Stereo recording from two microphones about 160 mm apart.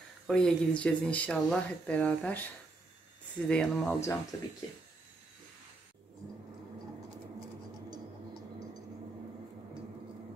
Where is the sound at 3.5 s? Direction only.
5° left (ahead or behind).